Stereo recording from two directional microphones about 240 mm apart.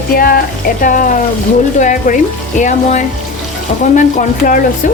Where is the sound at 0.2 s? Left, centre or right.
Left.